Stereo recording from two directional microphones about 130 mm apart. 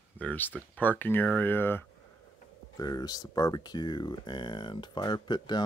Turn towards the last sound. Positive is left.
turn(degrees=35)  # may be behind; listen again after turning